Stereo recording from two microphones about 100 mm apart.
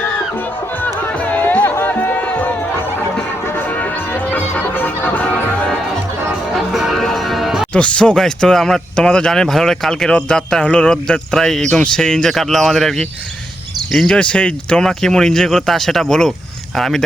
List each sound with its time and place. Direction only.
0.3 s music: 20° left (ahead or behind)
6.6 s music: centre (ahead or behind)
7.7 s speech: 10° left (ahead or behind)